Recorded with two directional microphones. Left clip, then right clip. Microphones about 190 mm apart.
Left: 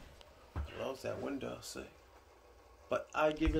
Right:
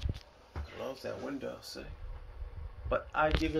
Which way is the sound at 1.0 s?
Centre (ahead or behind).